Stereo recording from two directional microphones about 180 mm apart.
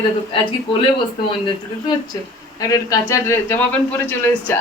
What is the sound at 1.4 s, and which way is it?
Speech, 25° left (ahead or behind).